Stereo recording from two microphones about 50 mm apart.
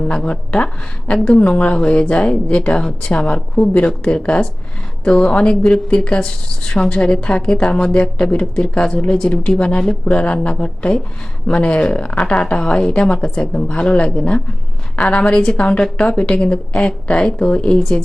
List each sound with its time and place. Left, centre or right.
0.1 s a woman's voice: left
15.3 s a woman's voice: centre
15.5 s speech: left